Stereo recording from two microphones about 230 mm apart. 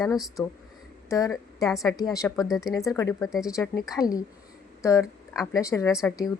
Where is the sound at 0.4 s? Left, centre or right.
Centre.